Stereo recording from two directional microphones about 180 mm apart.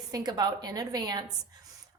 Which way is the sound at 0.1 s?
20° right (ahead or behind).